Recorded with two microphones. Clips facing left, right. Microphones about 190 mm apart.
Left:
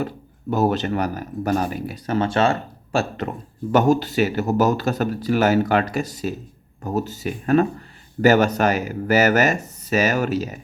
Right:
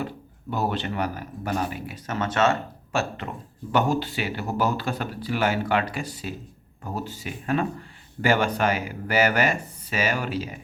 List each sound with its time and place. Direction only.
0.5 s speech: 45° left (ahead or behind)